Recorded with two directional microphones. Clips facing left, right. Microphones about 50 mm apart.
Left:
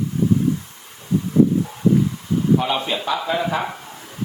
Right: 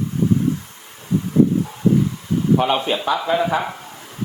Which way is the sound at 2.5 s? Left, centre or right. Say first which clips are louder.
Right 3 dB; right.